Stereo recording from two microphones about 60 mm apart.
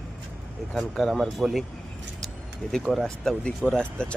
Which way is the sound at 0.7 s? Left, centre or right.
Centre.